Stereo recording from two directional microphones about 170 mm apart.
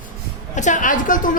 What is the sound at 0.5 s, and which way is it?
Speech, 45° left (ahead or behind).